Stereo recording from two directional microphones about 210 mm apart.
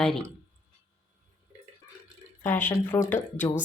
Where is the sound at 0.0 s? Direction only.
5° left (ahead or behind).